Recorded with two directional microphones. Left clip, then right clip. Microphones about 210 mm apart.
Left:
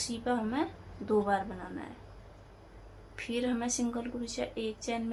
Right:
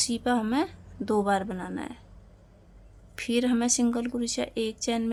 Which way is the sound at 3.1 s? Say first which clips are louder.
Right 7 dB; 55° right (ahead or behind).